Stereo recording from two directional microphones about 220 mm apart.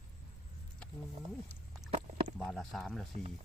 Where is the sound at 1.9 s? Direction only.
35° right (ahead or behind).